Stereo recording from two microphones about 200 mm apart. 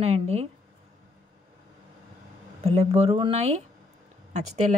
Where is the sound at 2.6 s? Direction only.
30° right (ahead or behind).